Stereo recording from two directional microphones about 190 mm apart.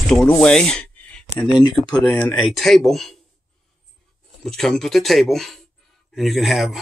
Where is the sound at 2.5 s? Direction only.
Centre (ahead or behind).